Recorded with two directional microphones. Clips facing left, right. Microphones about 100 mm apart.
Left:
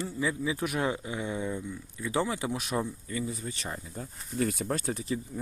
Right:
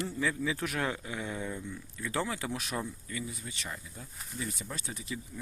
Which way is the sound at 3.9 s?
50° left (ahead or behind).